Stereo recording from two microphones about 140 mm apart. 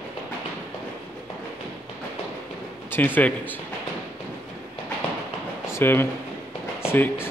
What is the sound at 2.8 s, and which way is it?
Speech, 15° left (ahead or behind).